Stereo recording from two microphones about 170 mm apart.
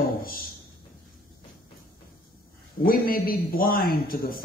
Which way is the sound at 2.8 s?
60° left (ahead or behind).